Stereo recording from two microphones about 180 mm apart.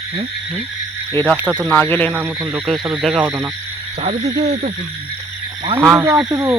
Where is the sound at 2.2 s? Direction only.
5° right (ahead or behind).